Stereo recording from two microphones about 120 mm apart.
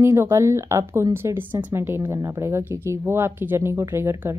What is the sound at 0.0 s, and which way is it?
Speech, 20° right (ahead or behind).